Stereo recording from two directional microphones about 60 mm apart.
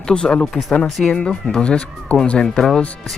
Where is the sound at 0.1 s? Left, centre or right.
Centre.